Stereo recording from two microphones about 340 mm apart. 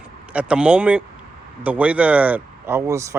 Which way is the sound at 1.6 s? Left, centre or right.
Centre.